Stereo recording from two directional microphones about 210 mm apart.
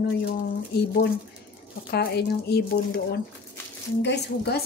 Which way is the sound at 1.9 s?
50° left (ahead or behind).